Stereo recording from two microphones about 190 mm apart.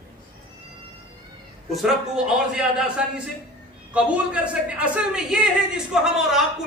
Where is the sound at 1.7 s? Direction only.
5° right (ahead or behind).